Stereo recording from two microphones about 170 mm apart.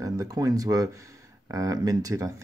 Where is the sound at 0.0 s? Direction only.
20° right (ahead or behind).